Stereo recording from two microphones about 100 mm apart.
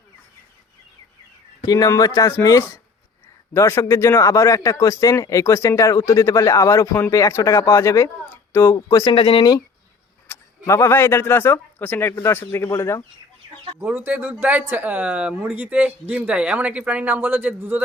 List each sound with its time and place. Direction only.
1.6 s speech: 40° left (ahead or behind)
9.1 s speech: 60° left (ahead or behind)
10.3 s a sound: 20° left (ahead or behind)
10.7 s a man's voice: 25° left (ahead or behind)
13.7 s speech: 20° right (ahead or behind)